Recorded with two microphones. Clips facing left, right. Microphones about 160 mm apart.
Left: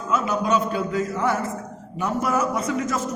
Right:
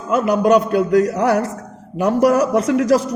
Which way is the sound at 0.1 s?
60° right (ahead or behind).